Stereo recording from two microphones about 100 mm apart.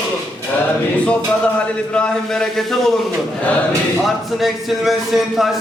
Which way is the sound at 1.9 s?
10° left (ahead or behind).